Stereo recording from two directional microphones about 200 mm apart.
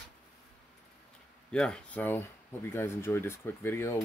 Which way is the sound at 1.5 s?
5° left (ahead or behind).